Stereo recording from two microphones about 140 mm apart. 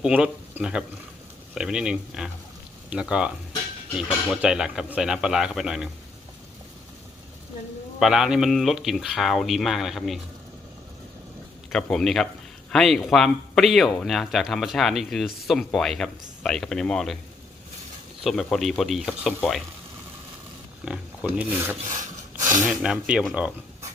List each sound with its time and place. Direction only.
0.0 s speech: 10° right (ahead or behind)
7.9 s speech: 5° right (ahead or behind)
11.7 s speech: 5° left (ahead or behind)
18.2 s speech: centre (ahead or behind)
20.8 s speech: 5° right (ahead or behind)
22.4 s a sound: 20° right (ahead or behind)
22.6 s speech: 5° right (ahead or behind)